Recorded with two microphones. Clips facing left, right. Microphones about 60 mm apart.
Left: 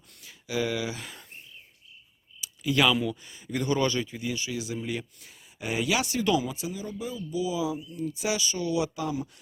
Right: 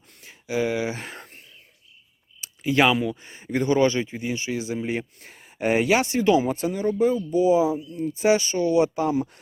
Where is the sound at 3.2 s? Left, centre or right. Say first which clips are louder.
Right 6 dB; right.